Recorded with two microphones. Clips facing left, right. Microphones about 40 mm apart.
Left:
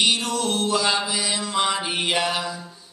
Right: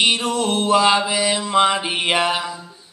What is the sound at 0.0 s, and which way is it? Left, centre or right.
Mantra, right.